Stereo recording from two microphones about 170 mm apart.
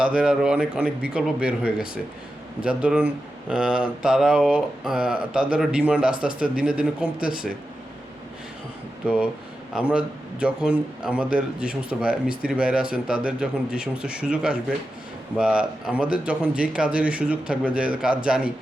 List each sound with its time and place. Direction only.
0.0 s a man's voice: 5° right (ahead or behind)
9.0 s a man's voice: 5° right (ahead or behind)